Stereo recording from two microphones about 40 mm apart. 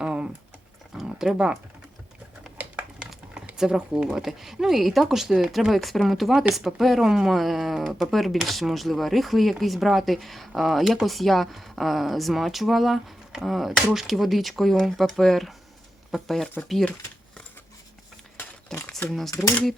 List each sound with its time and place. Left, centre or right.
0.0 s typing: right
1.0 s dog: centre
3.6 s speech: centre
4.2 s speech: centre
5.5 s speech: centre
7.0 s speech: centre
18.7 s a sound: centre
19.1 s speech: centre